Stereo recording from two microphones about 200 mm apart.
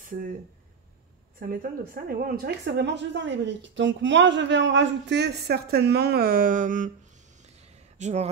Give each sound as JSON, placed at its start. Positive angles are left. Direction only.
{"t": 0.0, "sound": "speech", "side_deg": -40}
{"t": 1.4, "sound": "a woman's voice", "side_deg": -45}
{"t": 8.0, "sound": "speech", "side_deg": -35}